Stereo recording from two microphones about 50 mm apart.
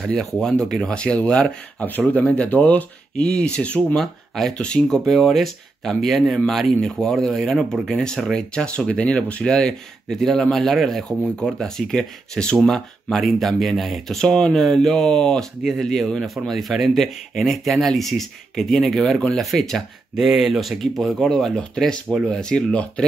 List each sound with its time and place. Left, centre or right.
0.4 s speech: centre
1.9 s speech: left
3.2 s speech: centre
3.9 s speech: centre
4.6 s speech: centre
5.0 s speech: centre
8.6 s speech: left
10.1 s speech: centre
11.1 s speech: centre
14.1 s speech: centre
20.2 s speech: centre